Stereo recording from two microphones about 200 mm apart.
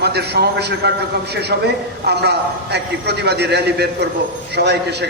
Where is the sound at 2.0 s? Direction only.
55° right (ahead or behind).